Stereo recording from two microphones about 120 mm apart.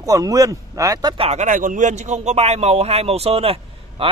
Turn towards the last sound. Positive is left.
turn(degrees=-55)  # may be behind; listen again after turning